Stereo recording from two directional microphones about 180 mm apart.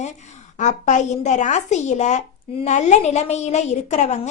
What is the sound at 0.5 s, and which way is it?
A woman's voice, 40° left (ahead or behind).